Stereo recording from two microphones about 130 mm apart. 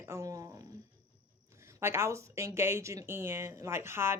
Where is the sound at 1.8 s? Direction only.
20° right (ahead or behind).